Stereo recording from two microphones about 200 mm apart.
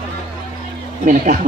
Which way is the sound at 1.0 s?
40° right (ahead or behind).